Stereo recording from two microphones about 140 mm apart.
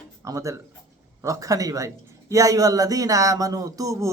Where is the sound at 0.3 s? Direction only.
20° right (ahead or behind).